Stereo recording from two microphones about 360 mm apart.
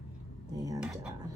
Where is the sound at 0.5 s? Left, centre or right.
Centre.